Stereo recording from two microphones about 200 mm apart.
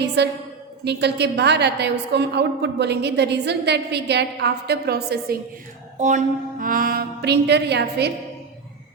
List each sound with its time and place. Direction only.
0.2 s a woman's voice: 55° right (ahead or behind)
6.0 s music: 35° right (ahead or behind); by 8.1 s 55° right (ahead or behind)